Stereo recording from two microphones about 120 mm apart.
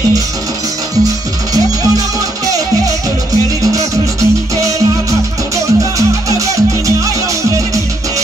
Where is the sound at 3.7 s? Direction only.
25° right (ahead or behind).